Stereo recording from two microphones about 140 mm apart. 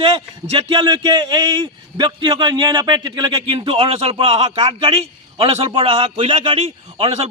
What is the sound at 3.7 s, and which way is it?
A man's voice, 45° right (ahead or behind).